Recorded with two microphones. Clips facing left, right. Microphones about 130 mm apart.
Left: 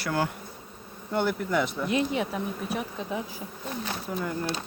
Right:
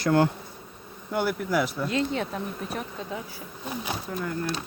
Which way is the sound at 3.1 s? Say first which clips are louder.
Left 3 dB; 20° left (ahead or behind).